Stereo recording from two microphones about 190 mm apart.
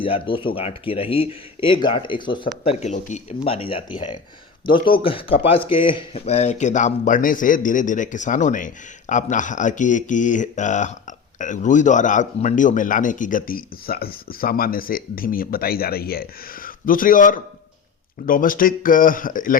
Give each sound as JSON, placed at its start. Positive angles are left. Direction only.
{"t": 0.0, "sound": "speech", "side_deg": 25}
{"t": 2.6, "sound": "speech", "side_deg": 40}